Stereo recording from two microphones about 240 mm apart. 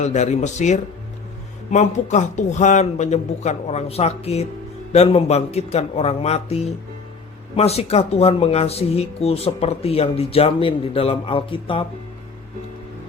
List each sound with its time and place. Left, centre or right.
0.0 s speech: left